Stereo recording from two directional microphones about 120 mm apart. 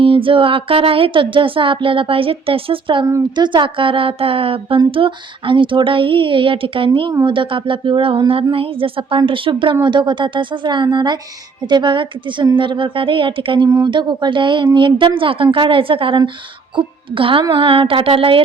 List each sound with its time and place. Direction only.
0.0 s speech: 45° right (ahead or behind)
13.7 s speech: 30° right (ahead or behind); by 18.4 s 50° right (ahead or behind)